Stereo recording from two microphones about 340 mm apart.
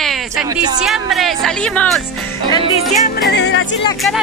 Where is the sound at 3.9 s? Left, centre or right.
Centre.